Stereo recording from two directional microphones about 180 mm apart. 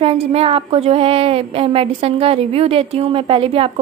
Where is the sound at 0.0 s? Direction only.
30° right (ahead or behind).